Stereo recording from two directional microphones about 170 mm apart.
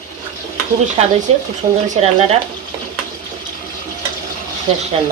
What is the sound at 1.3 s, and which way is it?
Speech, 35° right (ahead or behind).